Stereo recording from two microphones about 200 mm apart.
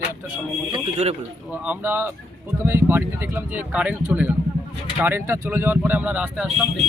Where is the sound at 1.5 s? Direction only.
10° right (ahead or behind).